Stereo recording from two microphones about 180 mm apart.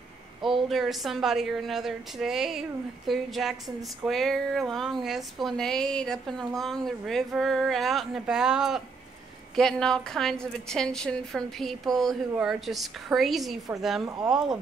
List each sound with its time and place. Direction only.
0.4 s a woman's voice: centre (ahead or behind)
14.0 s speech: 20° right (ahead or behind)